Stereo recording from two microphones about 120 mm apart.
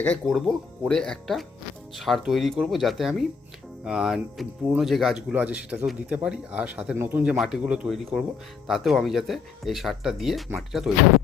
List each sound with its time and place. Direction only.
0.3 s speech: centre (ahead or behind)